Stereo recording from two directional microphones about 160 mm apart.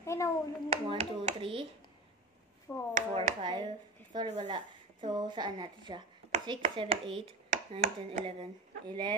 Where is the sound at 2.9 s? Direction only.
45° right (ahead or behind).